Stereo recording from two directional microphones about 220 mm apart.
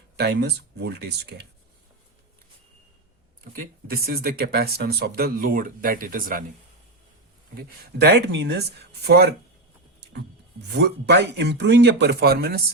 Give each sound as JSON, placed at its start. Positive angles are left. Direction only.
{"t": 0.2, "sound": "speech", "side_deg": -50}
{"t": 3.5, "sound": "speech", "side_deg": -45}
{"t": 7.5, "sound": "speech", "side_deg": -50}
{"t": 10.0, "sound": "music", "side_deg": -50}
{"t": 10.8, "sound": "speech", "side_deg": -50}